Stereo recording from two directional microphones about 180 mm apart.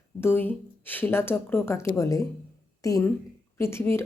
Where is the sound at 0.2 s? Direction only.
10° left (ahead or behind).